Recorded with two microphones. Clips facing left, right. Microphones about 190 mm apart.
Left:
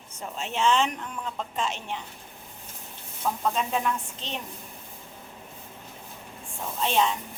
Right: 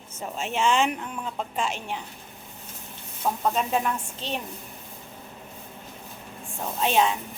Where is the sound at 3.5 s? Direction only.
5° right (ahead or behind).